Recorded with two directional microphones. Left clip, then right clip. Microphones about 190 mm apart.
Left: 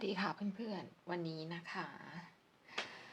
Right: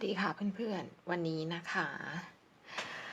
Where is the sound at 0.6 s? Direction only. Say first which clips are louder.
Right 7 dB; 30° right (ahead or behind).